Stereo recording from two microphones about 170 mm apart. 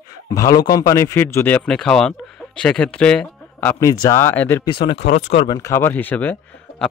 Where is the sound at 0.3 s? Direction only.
20° left (ahead or behind).